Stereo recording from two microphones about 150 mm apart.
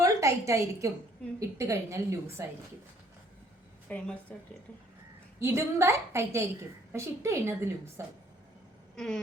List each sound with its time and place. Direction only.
0.0 s a woman's voice: 20° right (ahead or behind)
3.8 s a woman's voice: 10° left (ahead or behind)
5.4 s a woman's voice: 15° right (ahead or behind)
9.0 s a sound: 5° left (ahead or behind)